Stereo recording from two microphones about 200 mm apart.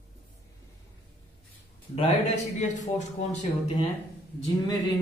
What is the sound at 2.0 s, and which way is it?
A man's voice, 35° left (ahead or behind).